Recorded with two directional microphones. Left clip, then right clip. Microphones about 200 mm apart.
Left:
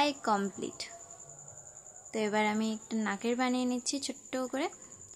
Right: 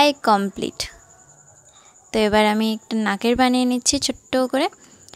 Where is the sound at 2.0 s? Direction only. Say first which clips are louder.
Right 13 dB; 45° right (ahead or behind).